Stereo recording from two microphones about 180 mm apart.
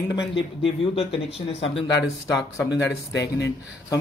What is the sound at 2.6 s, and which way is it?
Speech, 75° left (ahead or behind).